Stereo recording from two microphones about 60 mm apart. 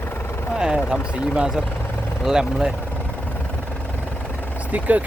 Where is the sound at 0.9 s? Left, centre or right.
Centre.